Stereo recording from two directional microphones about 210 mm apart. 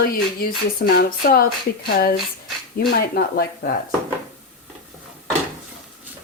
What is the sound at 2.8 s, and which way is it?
Speech, 50° left (ahead or behind).